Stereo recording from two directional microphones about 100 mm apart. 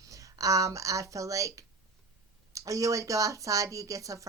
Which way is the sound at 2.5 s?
35° right (ahead or behind).